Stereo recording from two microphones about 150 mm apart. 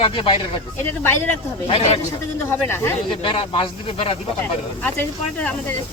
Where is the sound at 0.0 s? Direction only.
35° left (ahead or behind).